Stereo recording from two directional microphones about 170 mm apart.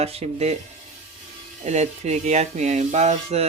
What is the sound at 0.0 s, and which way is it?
Music, 35° right (ahead or behind).